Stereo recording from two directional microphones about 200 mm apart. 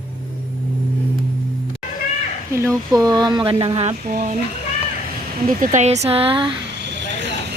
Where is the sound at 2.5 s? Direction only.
15° right (ahead or behind); by 3.9 s 30° right (ahead or behind).